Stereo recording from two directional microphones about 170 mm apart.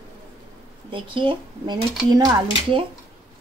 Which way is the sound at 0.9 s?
30° right (ahead or behind).